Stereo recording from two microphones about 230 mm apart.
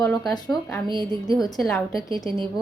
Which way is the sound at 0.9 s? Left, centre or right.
Centre.